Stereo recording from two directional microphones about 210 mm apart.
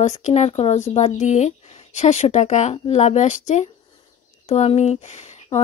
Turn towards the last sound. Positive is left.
turn(degrees=35)  # may be behind; listen again after turning